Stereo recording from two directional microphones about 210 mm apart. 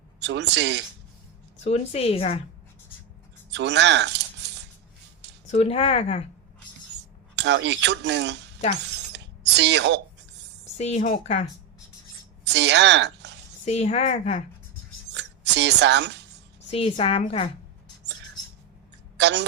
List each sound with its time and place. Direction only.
0.2 s speech: 55° right (ahead or behind)
1.6 s a woman's voice: 30° left (ahead or behind)
3.5 s scissors: 55° right (ahead or behind)
5.5 s a woman's voice: 30° left (ahead or behind)
7.3 s speech: 55° right (ahead or behind)
8.7 s a sound: 55° right (ahead or behind)
10.8 s speech: 30° left (ahead or behind)
12.5 s speech: 55° right (ahead or behind)
13.7 s speech: 30° left (ahead or behind)
15.1 s a sound: 55° right (ahead or behind)
16.7 s a woman's voice: 25° left (ahead or behind)
19.1 s tick: 55° right (ahead or behind)